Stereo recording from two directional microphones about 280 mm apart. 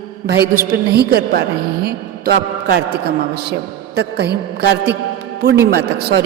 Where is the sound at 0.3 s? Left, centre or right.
Right.